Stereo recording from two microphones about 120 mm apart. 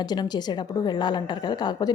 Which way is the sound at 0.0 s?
35° left (ahead or behind).